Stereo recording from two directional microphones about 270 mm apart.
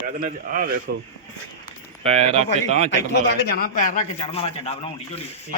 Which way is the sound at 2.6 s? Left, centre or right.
Left.